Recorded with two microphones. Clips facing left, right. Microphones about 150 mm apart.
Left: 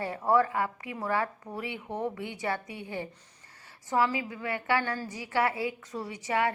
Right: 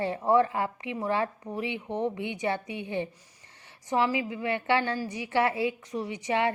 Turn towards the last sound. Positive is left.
turn(degrees=-25)  # may be behind; listen again after turning